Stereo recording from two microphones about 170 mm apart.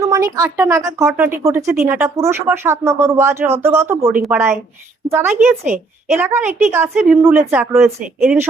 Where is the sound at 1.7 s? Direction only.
5° right (ahead or behind).